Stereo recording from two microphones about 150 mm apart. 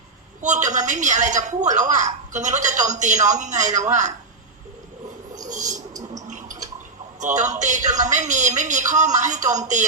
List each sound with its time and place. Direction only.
0.4 s a woman's voice: 55° right (ahead or behind)
5.5 s rodents: 55° right (ahead or behind)
6.2 s a sound: 55° right (ahead or behind)
7.2 s a man's voice: 55° right (ahead or behind)